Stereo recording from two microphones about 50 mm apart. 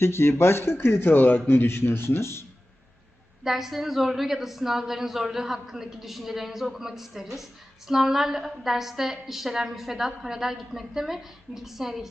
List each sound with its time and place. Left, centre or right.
0.0 s speech: left
1.1 s a man's voice: left
1.5 s speech: left
3.4 s a woman's voice: centre